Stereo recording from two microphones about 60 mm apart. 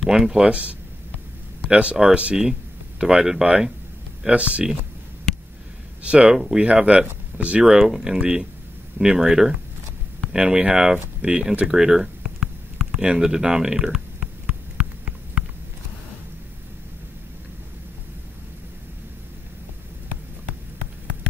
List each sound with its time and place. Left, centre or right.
0.0 s speech: centre
0.5 s speech: right
6.0 s speech: centre
7.8 s speech: centre
12.9 s a sound: centre